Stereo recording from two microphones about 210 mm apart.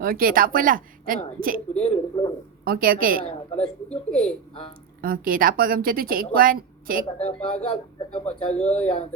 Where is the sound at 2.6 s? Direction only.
45° right (ahead or behind).